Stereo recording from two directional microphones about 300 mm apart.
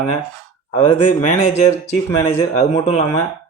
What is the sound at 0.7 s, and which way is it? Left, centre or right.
Speech, centre.